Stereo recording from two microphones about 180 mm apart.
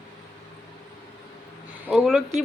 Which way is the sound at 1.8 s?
Centre (ahead or behind).